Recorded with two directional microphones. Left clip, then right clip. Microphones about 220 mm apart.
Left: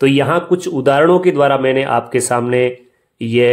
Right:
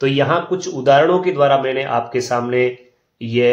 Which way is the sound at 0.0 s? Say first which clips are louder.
Left 3 dB; 50° left (ahead or behind).